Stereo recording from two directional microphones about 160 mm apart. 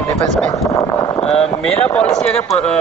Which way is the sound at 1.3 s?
5° left (ahead or behind).